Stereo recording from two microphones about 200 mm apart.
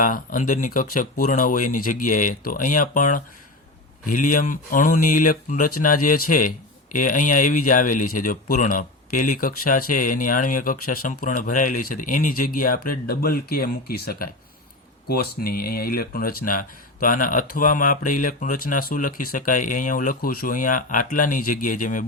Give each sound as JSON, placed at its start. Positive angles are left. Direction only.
{"t": 0.0, "sound": "speech", "side_deg": 40}